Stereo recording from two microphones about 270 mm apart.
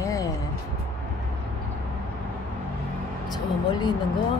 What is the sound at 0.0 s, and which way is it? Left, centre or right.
Music, centre.